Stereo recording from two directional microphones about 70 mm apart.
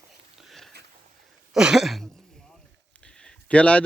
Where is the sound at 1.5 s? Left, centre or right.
Centre.